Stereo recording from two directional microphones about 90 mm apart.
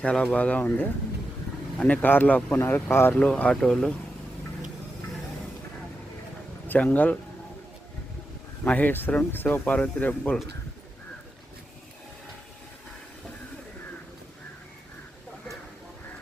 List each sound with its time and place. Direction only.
0.0 s speech: 10° left (ahead or behind)
6.7 s speech: 20° left (ahead or behind)
8.6 s speech: 20° left (ahead or behind)